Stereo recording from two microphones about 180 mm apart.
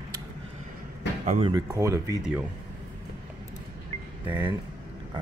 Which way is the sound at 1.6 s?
15° right (ahead or behind).